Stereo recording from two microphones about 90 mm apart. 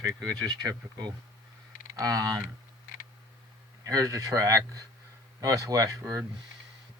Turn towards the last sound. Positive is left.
turn(degrees=-35)  # may be behind; listen again after turning